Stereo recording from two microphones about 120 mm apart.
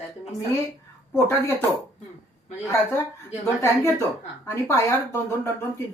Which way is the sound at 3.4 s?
20° left (ahead or behind).